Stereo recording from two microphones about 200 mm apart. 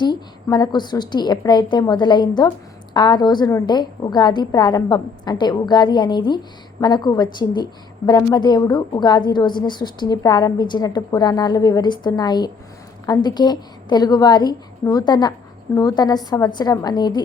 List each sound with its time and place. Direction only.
0.0 s a woman's voice: 20° left (ahead or behind)